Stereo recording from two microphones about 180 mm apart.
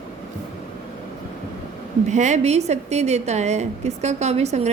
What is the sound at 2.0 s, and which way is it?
A woman's voice, 40° right (ahead or behind).